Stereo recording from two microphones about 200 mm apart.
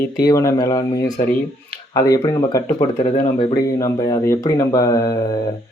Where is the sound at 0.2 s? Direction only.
15° left (ahead or behind).